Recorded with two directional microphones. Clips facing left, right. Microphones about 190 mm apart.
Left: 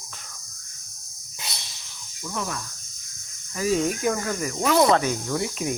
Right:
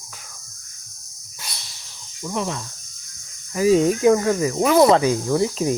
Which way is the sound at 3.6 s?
35° right (ahead or behind).